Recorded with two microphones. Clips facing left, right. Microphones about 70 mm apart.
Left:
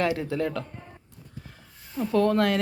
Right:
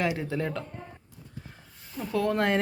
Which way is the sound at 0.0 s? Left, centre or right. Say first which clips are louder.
Left 3 dB; centre.